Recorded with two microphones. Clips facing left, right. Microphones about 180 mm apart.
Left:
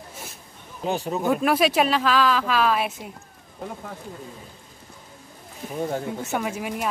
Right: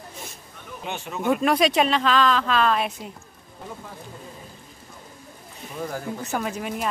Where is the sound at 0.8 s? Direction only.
35° left (ahead or behind).